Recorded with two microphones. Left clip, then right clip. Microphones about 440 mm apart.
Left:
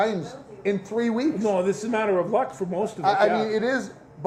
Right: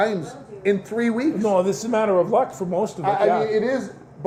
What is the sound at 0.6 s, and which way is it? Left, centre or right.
Speech, left.